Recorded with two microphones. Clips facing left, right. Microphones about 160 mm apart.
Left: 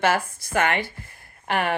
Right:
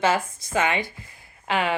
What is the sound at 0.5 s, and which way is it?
Speech, 60° left (ahead or behind).